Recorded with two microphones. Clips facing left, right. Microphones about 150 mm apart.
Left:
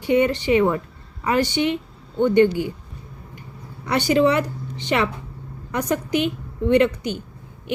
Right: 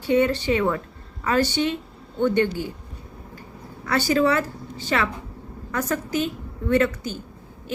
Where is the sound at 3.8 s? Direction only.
20° left (ahead or behind).